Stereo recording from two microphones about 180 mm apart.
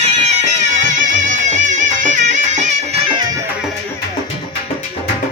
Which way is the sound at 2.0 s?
45° right (ahead or behind).